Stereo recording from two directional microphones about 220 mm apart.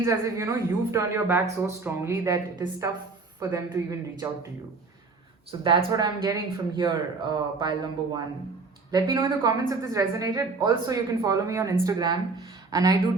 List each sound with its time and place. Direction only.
0.0 s a woman's voice: 15° right (ahead or behind)
5.5 s a woman's voice: 20° right (ahead or behind)